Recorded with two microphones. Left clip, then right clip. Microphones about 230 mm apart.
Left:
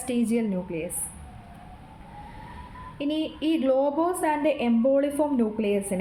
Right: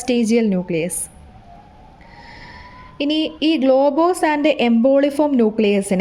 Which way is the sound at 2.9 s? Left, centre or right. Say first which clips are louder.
Right 9 dB; right.